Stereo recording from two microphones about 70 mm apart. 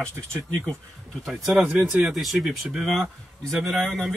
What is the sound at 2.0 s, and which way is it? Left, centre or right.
A man's voice, centre.